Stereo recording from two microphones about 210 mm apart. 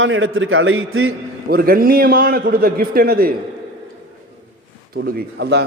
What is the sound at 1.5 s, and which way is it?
A man's voice, 45° right (ahead or behind).